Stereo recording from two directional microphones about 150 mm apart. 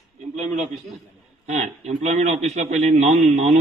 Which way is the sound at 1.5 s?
50° right (ahead or behind).